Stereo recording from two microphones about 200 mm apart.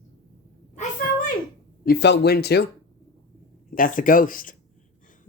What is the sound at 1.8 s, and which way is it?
Speech, 55° left (ahead or behind).